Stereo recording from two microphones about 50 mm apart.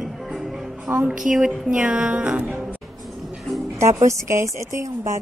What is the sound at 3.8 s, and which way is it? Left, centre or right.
A woman's voice, right.